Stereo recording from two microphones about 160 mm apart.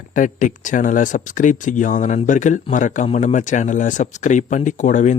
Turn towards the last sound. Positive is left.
turn(degrees=50)  # may be behind; listen again after turning